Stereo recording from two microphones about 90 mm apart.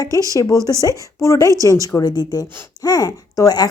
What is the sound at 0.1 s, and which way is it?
Speech, 35° right (ahead or behind).